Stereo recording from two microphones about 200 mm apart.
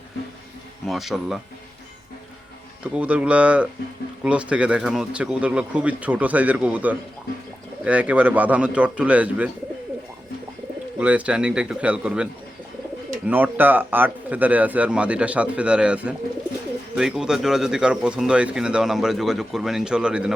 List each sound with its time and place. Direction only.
0.9 s speech: centre (ahead or behind)
2.8 s speech: 5° right (ahead or behind)
10.9 s speech: 5° right (ahead or behind)